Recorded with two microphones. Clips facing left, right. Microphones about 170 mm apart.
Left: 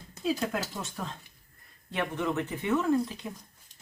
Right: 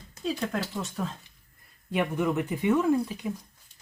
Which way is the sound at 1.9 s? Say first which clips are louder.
Right 4 dB; 10° right (ahead or behind).